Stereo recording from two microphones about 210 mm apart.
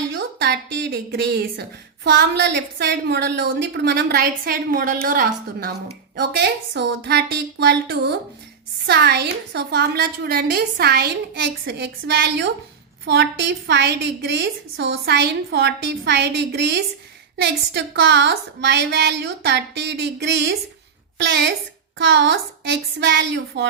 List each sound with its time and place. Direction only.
0.1 s a woman's voice: 55° right (ahead or behind)